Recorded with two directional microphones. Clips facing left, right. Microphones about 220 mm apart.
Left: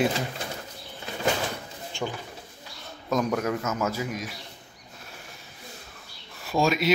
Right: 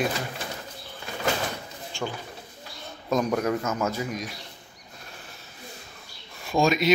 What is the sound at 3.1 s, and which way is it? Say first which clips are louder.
A man's voice: right 1 dB; centre (ahead or behind).